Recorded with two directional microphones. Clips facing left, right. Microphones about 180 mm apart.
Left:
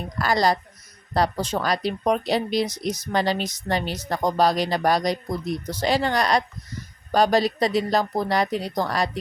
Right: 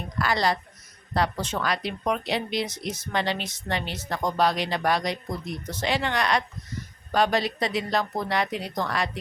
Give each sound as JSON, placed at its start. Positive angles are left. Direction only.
{"t": 0.2, "sound": "speech", "side_deg": 40}